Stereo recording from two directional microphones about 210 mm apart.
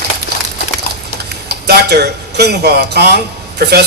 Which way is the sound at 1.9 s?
50° right (ahead or behind).